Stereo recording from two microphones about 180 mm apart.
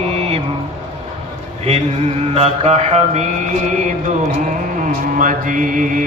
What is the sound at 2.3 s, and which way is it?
Mantra, 35° right (ahead or behind).